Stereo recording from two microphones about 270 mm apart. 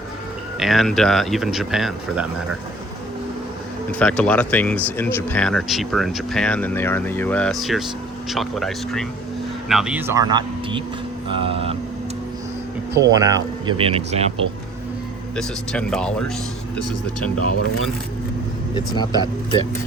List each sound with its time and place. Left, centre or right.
0.6 s speech: centre
3.9 s speech: centre; by 11.8 s right
12.9 s speech: centre
15.4 s speech: centre
18.7 s speech: centre